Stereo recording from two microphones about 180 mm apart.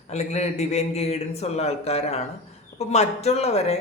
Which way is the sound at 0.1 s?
40° left (ahead or behind).